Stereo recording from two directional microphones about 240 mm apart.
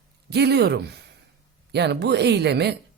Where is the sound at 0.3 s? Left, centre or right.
Right.